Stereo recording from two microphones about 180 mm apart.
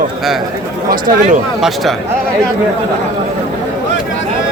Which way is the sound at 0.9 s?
50° right (ahead or behind).